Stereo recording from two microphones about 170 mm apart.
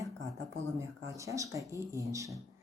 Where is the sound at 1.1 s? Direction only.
20° right (ahead or behind).